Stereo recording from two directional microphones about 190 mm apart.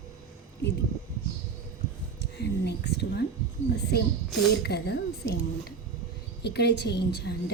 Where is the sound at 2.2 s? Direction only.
60° left (ahead or behind).